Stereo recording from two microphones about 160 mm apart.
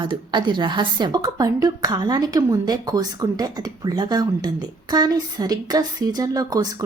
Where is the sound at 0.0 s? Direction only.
30° right (ahead or behind).